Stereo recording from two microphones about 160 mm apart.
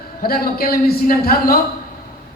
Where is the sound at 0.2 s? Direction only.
70° left (ahead or behind).